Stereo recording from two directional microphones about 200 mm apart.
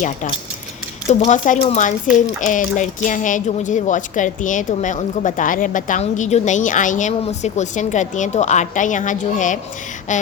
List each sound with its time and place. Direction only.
1.3 s speech: 35° left (ahead or behind)